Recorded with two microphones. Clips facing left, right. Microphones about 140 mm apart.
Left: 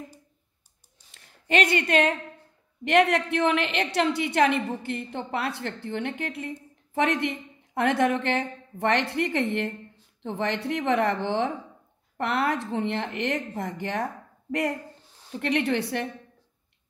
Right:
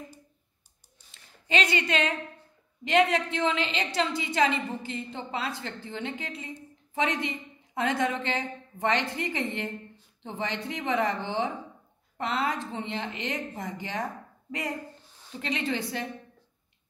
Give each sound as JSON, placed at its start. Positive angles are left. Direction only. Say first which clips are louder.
{"t": 1.1, "sound": "a woman's voice", "louder": "left 4 dB", "side_deg": 55}